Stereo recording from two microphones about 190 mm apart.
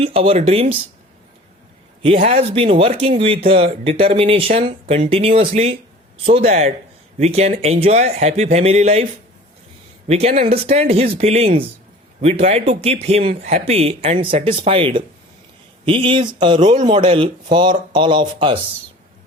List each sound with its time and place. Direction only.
0.0 s speech: 30° right (ahead or behind)
2.1 s speech: 35° right (ahead or behind)
10.1 s speech: 35° right (ahead or behind)